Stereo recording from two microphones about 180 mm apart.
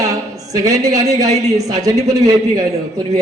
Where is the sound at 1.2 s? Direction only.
40° right (ahead or behind).